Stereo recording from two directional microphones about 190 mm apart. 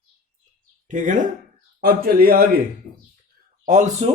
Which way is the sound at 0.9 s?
40° right (ahead or behind).